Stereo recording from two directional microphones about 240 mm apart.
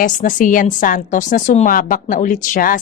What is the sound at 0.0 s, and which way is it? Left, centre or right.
A woman's voice, left.